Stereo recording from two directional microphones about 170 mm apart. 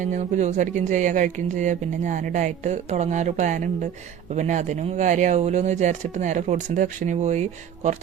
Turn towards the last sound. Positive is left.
turn(degrees=-40)  # may be behind; listen again after turning